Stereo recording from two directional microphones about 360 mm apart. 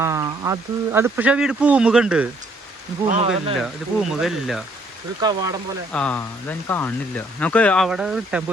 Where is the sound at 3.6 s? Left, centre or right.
Centre.